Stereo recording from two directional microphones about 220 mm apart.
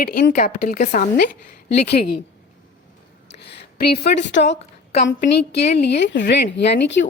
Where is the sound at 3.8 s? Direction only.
45° left (ahead or behind).